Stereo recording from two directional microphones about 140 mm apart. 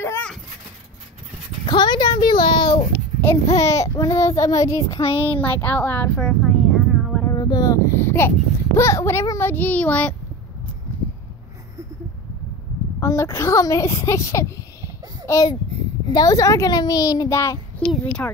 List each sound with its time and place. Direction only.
0.0 s a sound: 15° left (ahead or behind)
1.7 s a sound: 30° left (ahead or behind)
3.2 s a child's voice: 20° left (ahead or behind)
5.0 s speech: 40° left (ahead or behind)
5.4 s speech: 15° left (ahead or behind); by 7.2 s 5° right (ahead or behind)
7.2 s a sound: 25° left (ahead or behind)
8.7 s a child's voice: 20° left (ahead or behind)
13.0 s a child's voice: 20° left (ahead or behind)
17.7 s a child's voice: 10° left (ahead or behind)